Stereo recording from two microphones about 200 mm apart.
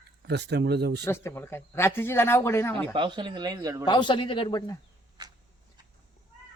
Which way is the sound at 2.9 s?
25° right (ahead or behind).